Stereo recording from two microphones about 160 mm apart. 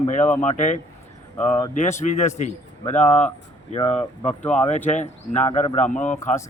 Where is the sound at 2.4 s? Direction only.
45° left (ahead or behind).